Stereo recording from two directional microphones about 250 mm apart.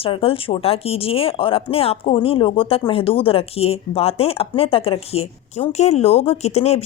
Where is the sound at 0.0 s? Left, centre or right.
Left.